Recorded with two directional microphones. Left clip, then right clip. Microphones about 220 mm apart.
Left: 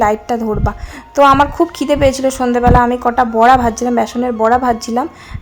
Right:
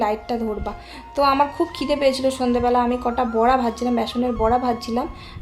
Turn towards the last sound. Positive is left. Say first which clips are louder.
# left 8 dB
turn(degrees=25)  # may be behind; listen again after turning